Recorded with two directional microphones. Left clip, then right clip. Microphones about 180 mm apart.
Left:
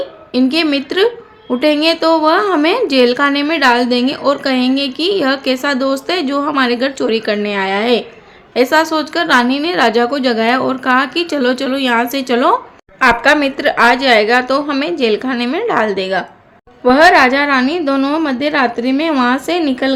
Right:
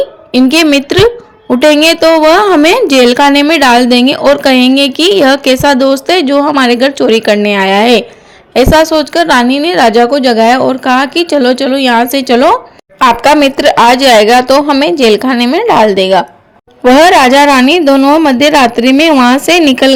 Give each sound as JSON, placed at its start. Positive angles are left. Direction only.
{"t": 0.3, "sound": "a woman's voice", "side_deg": -40}
{"t": 16.8, "sound": "a woman's voice", "side_deg": -45}